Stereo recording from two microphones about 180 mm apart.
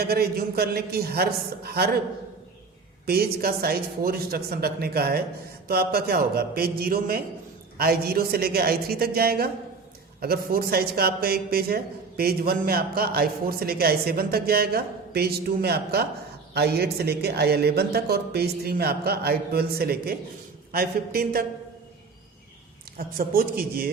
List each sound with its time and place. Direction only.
0.0 s speech: 60° right (ahead or behind)
3.1 s speech: 60° right (ahead or behind)
23.0 s a man's voice: 50° right (ahead or behind)